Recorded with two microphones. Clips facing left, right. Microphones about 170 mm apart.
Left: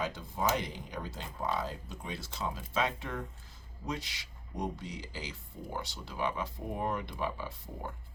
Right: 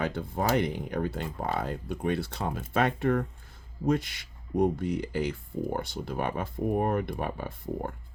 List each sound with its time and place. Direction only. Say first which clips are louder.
0.0 s speech: right 4 dB; 60° right (ahead or behind)